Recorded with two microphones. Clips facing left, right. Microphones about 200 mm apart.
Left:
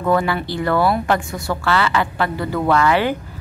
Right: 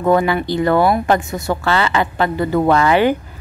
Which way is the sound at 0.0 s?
20° right (ahead or behind).